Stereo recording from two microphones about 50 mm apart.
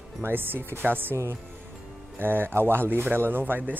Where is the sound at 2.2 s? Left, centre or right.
Right.